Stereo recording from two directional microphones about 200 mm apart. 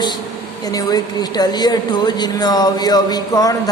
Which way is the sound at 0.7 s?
20° left (ahead or behind).